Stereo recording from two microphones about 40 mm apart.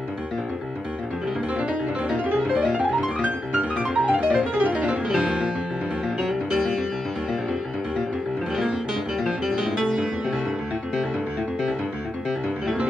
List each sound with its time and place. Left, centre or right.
1.6 s music: right
2.8 s music: right
5.0 s music: right
6.2 s music: centre
9.2 s music: centre
12.3 s music: centre